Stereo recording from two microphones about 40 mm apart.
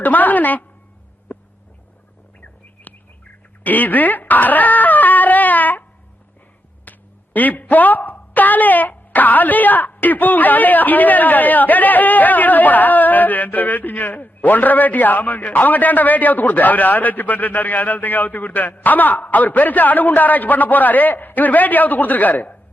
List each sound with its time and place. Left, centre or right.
0.0 s speech: left
1.3 s a sound: left
2.9 s bird: left
3.6 s a sound: left
6.9 s quack: left
7.3 s speech: left